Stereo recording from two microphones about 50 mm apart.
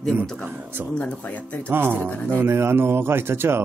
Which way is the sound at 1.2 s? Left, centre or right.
Left.